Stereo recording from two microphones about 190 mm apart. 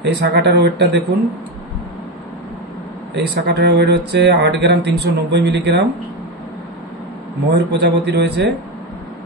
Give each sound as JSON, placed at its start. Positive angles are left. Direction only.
{"t": 0.0, "sound": "speech", "side_deg": -65}
{"t": 3.2, "sound": "speech", "side_deg": -60}
{"t": 7.5, "sound": "speech", "side_deg": -60}